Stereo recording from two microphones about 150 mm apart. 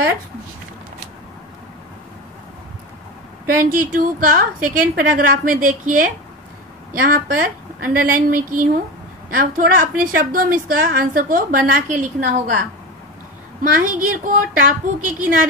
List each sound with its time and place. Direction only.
3.4 s a woman's voice: 65° right (ahead or behind)